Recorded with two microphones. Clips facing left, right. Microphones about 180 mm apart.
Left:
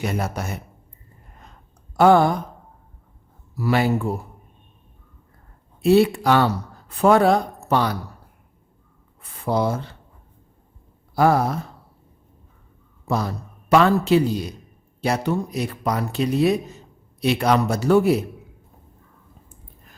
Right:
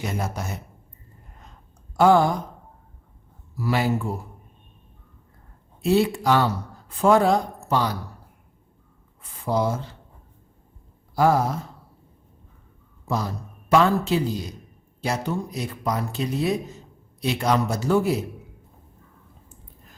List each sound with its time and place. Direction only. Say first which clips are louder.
0.0 s speech: left 3 dB; 65° left (ahead or behind)
2.0 s speech: left 2 dB; 60° left (ahead or behind)
3.6 s speech: left 3 dB; 60° left (ahead or behind)
5.8 s speech: left 4 dB; 65° left (ahead or behind)
9.2 s speech: left 2 dB; 65° left (ahead or behind)
11.1 s speech: left 2 dB; 65° left (ahead or behind)
13.1 s a man's voice: left 3 dB; 65° left (ahead or behind)